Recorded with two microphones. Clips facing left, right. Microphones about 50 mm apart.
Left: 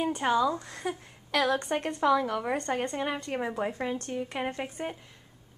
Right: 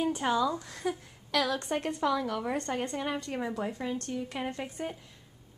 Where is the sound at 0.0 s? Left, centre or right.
Centre.